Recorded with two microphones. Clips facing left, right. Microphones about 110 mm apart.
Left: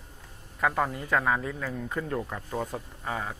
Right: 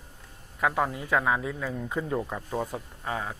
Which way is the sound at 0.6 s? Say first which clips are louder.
Right 1 dB; 5° right (ahead or behind).